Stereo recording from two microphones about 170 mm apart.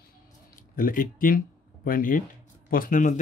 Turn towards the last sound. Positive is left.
turn(degrees=50)  # may be behind; listen again after turning